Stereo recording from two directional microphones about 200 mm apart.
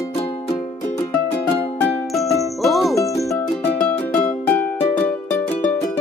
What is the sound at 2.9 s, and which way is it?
Music, 15° left (ahead or behind).